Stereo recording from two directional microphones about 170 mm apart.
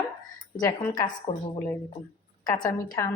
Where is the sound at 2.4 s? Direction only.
25° left (ahead or behind).